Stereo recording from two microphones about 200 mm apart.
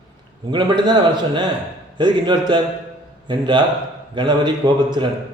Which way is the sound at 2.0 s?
20° right (ahead or behind).